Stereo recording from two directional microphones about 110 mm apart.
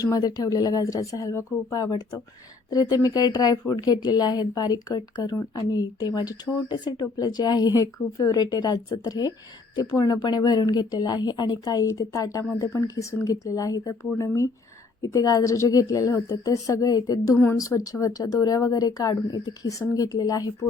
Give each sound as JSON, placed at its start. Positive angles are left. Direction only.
{"t": 0.0, "sound": "speech", "side_deg": 35}